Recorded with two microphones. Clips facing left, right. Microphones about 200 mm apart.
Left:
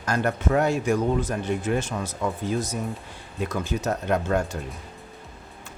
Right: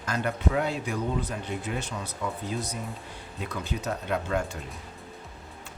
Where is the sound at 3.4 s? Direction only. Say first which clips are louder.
Left 6 dB; 45° left (ahead or behind).